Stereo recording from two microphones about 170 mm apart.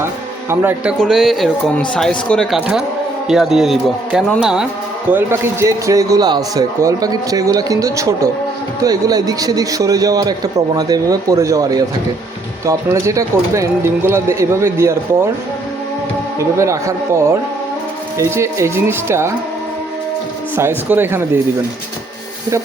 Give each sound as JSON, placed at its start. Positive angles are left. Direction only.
{"t": 0.6, "sound": "speech", "side_deg": -10}
{"t": 0.9, "sound": "speech", "side_deg": 5}
{"t": 5.1, "sound": "a man's voice", "side_deg": -15}
{"t": 16.4, "sound": "speech", "side_deg": -15}
{"t": 18.2, "sound": "speech", "side_deg": -15}
{"t": 20.6, "sound": "speech", "side_deg": -15}